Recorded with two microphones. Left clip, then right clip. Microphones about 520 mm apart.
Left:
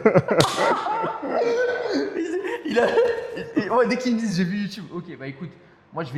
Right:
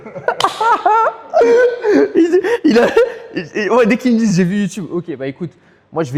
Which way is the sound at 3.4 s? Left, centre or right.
Right.